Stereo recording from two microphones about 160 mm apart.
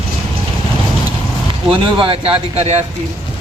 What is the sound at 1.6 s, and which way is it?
A man's voice, 30° right (ahead or behind).